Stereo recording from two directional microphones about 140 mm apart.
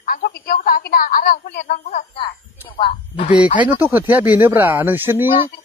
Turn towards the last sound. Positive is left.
turn(degrees=-15)  # may be behind; listen again after turning